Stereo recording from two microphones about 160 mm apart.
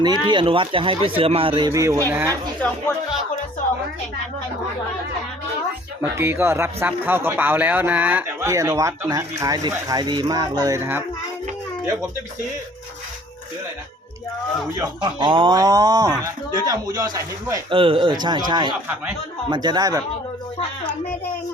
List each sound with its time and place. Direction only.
0.0 s speech: 30° right (ahead or behind)
1.7 s speech: 20° right (ahead or behind)
6.0 s speech: 10° right (ahead or behind)
14.8 s speech: 25° right (ahead or behind)
17.7 s speech: 35° right (ahead or behind)